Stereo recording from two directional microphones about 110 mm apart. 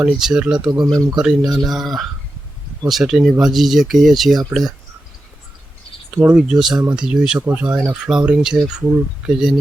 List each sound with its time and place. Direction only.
0.0 s speech: 5° right (ahead or behind)
6.2 s speech: 5° right (ahead or behind)